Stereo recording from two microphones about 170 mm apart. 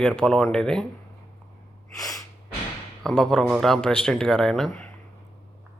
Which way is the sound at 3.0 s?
5° left (ahead or behind).